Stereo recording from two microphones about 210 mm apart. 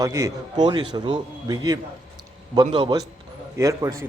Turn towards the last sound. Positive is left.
turn(degrees=-15)  # may be behind; listen again after turning